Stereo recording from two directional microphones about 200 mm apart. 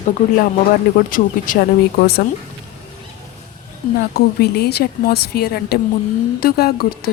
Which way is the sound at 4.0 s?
50° left (ahead or behind).